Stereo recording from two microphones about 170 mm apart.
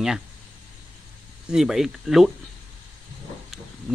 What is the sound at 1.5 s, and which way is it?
Speech, 5° right (ahead or behind).